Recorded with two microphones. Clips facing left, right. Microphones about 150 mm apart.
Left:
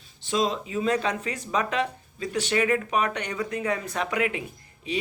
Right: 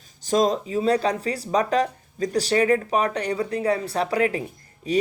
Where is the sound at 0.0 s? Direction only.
40° right (ahead or behind).